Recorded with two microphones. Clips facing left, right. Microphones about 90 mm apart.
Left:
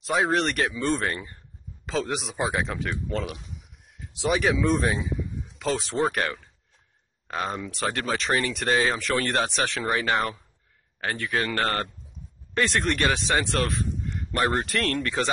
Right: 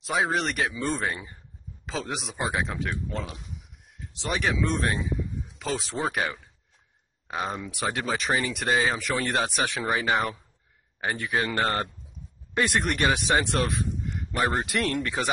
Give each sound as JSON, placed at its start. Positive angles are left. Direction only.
{"t": 0.0, "sound": "speech", "side_deg": 0}
{"t": 13.8, "sound": "a sound", "side_deg": -5}
{"t": 14.7, "sound": "speech", "side_deg": -15}